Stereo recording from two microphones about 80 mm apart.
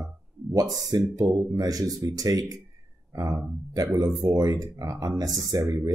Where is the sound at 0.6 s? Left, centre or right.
Right.